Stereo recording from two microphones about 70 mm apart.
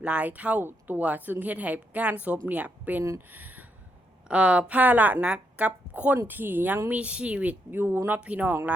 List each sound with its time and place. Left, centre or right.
0.0 s a woman's voice: centre
3.3 s a sound: right
4.3 s a woman's voice: centre
7.7 s a woman's voice: right